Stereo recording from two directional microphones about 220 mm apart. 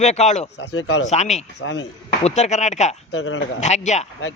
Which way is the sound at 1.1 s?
30° left (ahead or behind).